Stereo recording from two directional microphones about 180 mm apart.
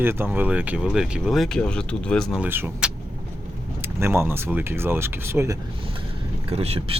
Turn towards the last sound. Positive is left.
turn(degrees=-35)  # may be behind; listen again after turning